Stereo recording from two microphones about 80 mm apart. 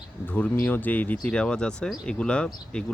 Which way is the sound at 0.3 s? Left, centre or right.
Centre.